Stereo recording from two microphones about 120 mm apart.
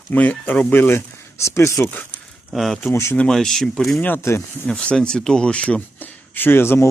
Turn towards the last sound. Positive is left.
turn(degrees=20)  # may be behind; listen again after turning